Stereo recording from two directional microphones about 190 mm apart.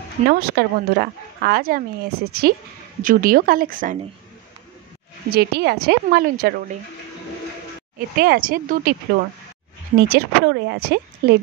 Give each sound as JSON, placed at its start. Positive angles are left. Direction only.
{"t": 0.3, "sound": "a woman's voice", "side_deg": -55}
{"t": 5.3, "sound": "a woman's voice", "side_deg": -55}
{"t": 8.2, "sound": "speech", "side_deg": -50}
{"t": 9.9, "sound": "a woman's voice", "side_deg": -55}